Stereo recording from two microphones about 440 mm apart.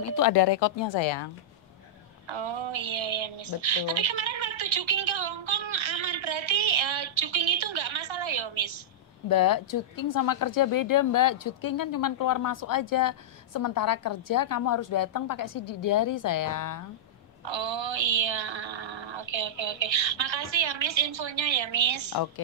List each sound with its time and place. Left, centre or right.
0.0 s speech: left
2.2 s speech: right
3.8 s a sound: right
9.3 s speech: left
17.5 s speech: right